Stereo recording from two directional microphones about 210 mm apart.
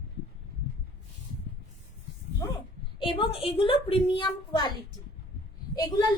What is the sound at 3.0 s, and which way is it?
A woman's voice, 25° left (ahead or behind).